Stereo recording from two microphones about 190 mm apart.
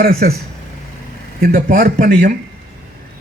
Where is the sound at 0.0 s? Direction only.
50° right (ahead or behind).